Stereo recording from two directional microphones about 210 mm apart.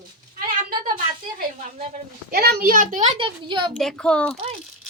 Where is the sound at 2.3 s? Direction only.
45° right (ahead or behind); by 3.7 s 25° right (ahead or behind).